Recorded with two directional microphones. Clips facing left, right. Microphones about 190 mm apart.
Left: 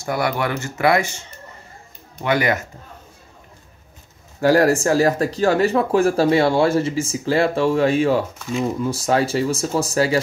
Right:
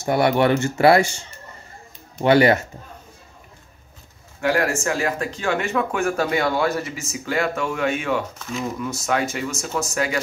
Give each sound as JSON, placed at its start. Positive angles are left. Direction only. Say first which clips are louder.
{"t": 0.0, "sound": "speech", "louder": "right 4 dB", "side_deg": -25}
{"t": 2.2, "sound": "speech", "louder": "right 5 dB", "side_deg": -30}
{"t": 4.4, "sound": "speech", "louder": "left 6 dB", "side_deg": 35}